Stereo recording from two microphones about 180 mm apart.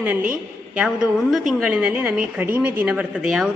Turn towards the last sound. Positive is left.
turn(degrees=-5)  # may be behind; listen again after turning